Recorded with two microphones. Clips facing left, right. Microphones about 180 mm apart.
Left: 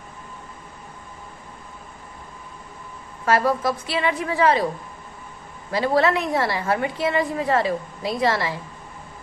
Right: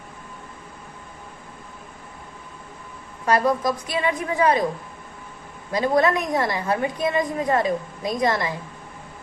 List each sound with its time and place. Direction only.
3.3 s a woman's voice: 20° right (ahead or behind)
5.7 s a woman's voice: 15° right (ahead or behind)